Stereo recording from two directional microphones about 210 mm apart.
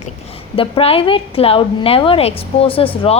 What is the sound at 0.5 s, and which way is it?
A woman's voice, 25° left (ahead or behind).